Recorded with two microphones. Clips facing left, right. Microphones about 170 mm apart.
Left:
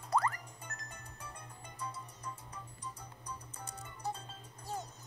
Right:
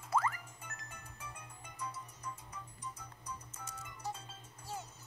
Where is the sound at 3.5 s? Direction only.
35° left (ahead or behind).